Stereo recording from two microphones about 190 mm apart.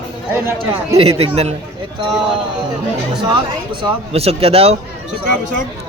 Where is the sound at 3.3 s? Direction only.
30° right (ahead or behind).